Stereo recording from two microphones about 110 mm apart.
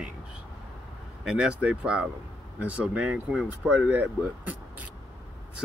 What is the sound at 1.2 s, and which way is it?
Speech, 5° right (ahead or behind).